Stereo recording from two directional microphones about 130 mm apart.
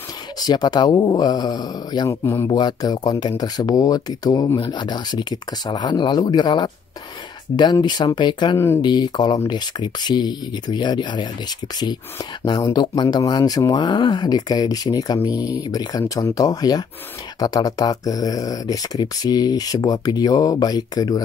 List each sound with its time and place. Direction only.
0.4 s speech: 30° left (ahead or behind)
2.2 s speech: 20° left (ahead or behind)
2.6 s speech: 30° left (ahead or behind)
12.4 s speech: 30° left (ahead or behind)